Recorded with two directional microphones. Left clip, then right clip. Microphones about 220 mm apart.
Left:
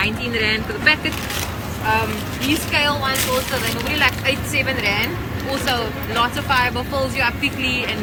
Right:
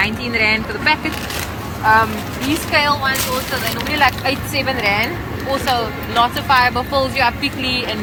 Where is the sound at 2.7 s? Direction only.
15° right (ahead or behind).